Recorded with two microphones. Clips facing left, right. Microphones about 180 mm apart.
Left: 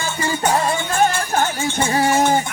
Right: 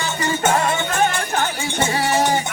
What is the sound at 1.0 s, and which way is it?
Music, 40° left (ahead or behind).